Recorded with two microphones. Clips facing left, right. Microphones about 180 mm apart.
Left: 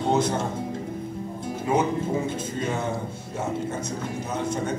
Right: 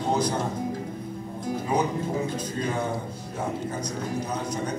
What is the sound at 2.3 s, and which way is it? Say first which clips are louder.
A man's voice: even; 25° left (ahead or behind).